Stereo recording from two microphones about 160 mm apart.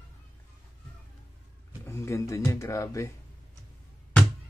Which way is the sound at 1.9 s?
15° left (ahead or behind).